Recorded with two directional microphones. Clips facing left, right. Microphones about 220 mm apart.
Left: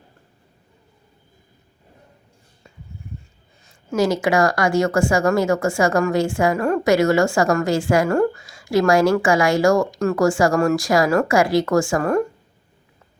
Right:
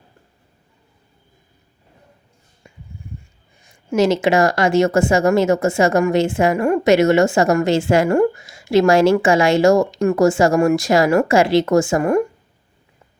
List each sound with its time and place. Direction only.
3.6 s speech: 20° right (ahead or behind)
6.6 s a woman's voice: 10° right (ahead or behind)
6.8 s speech: 20° right (ahead or behind)